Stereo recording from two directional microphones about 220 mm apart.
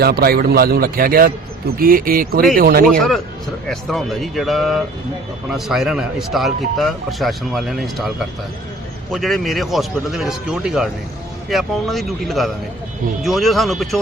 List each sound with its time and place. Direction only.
0.0 s a man's voice: 45° right (ahead or behind)
3.7 s a man's voice: centre (ahead or behind)
9.1 s a man's voice: centre (ahead or behind)